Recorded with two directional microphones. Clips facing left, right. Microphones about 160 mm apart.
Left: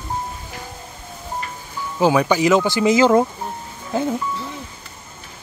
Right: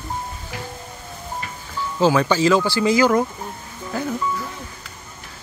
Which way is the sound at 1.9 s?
15° left (ahead or behind).